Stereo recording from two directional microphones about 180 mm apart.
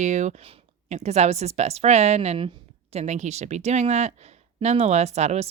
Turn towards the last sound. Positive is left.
turn(degrees=-40)  # may be behind; listen again after turning